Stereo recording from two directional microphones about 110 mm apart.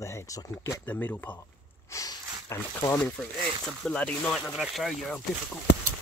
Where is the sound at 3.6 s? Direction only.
5° left (ahead or behind).